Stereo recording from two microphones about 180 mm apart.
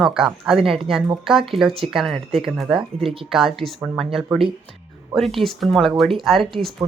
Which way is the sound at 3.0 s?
30° right (ahead or behind).